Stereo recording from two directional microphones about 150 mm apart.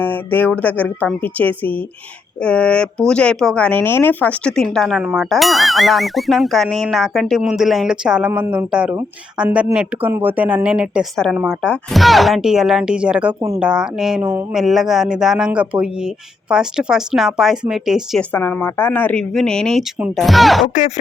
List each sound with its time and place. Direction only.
0.0 s speech: 10° left (ahead or behind)
18.2 s speech: 15° left (ahead or behind)
20.7 s speech: 50° left (ahead or behind)